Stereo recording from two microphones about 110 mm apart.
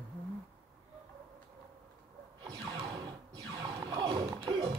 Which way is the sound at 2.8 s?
40° right (ahead or behind).